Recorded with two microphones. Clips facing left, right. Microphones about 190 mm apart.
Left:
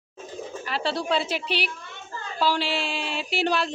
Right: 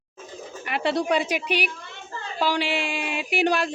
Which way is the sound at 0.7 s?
20° right (ahead or behind).